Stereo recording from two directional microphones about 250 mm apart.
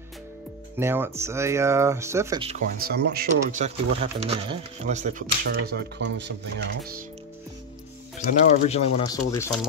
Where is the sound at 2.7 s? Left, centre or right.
Right.